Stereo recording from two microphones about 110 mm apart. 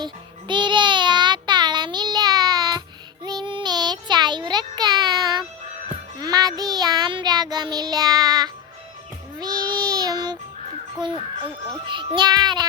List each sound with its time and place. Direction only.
0.0 s child singing: 45° right (ahead or behind)
9.4 s music: 40° right (ahead or behind)
11.7 s a child's voice: 45° right (ahead or behind)